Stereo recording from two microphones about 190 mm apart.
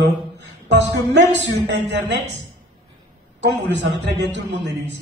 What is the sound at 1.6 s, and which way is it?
Speech, 65° right (ahead or behind).